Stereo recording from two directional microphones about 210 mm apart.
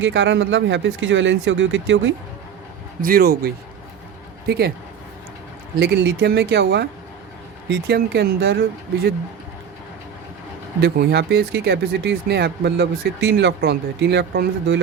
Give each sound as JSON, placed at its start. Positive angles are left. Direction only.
{"t": 0.0, "sound": "speech", "side_deg": -65}
{"t": 3.0, "sound": "speech", "side_deg": -45}
{"t": 5.8, "sound": "speech", "side_deg": -50}
{"t": 10.8, "sound": "speech", "side_deg": -50}